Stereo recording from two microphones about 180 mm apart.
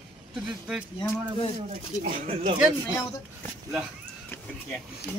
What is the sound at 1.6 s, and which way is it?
Speech, 35° right (ahead or behind).